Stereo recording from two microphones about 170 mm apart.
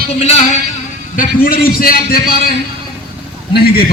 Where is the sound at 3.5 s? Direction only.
70° left (ahead or behind).